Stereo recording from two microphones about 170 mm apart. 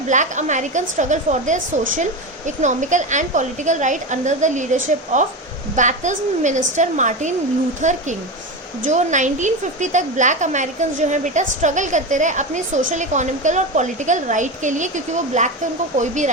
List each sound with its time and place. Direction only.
0.1 s a woman's voice: 45° right (ahead or behind)